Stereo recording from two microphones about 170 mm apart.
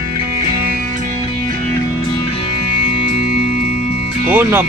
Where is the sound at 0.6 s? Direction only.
55° right (ahead or behind).